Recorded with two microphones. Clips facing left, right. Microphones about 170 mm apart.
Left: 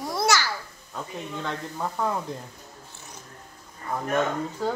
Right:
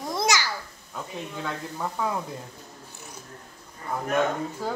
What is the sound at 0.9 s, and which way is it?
Speech, 5° right (ahead or behind).